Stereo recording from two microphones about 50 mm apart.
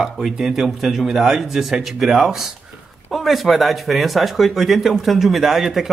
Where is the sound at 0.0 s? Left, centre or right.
Centre.